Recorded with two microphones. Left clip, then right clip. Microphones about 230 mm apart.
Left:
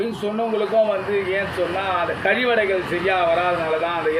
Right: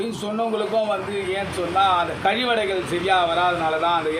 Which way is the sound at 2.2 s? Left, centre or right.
Right.